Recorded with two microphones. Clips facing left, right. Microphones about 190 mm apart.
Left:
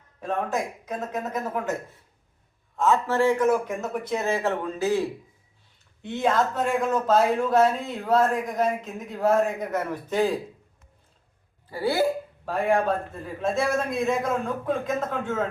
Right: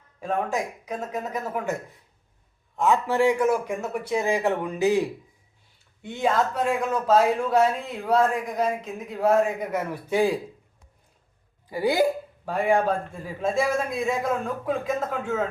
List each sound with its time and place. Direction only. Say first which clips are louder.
0.2 s a man's voice: right 1 dB; centre (ahead or behind)
6.0 s a man's voice: even; 5° right (ahead or behind)
11.7 s a man's voice: right 2 dB; 15° right (ahead or behind)
12.5 s a man's voice: right 1 dB; centre (ahead or behind)